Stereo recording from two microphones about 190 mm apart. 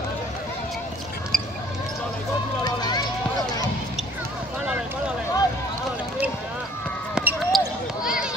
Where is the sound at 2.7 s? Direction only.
20° left (ahead or behind).